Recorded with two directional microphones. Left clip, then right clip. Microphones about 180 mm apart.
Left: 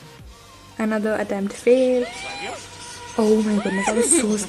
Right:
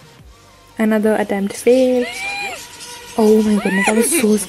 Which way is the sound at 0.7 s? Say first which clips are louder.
Right 7 dB; 30° right (ahead or behind).